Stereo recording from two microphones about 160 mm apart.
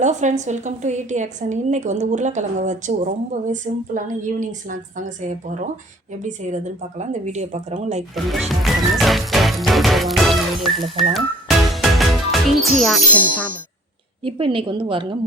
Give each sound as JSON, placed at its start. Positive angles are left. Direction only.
{"t": 0.0, "sound": "a woman's voice", "side_deg": -50}
{"t": 7.0, "sound": "a woman's voice", "side_deg": -45}
{"t": 8.1, "sound": "music", "side_deg": 0}
{"t": 14.3, "sound": "a woman's voice", "side_deg": -35}